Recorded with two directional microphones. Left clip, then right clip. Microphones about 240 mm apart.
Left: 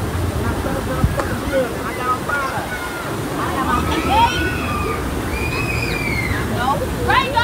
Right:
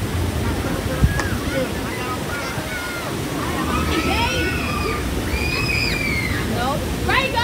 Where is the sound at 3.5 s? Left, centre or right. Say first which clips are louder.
Left 3 dB; centre.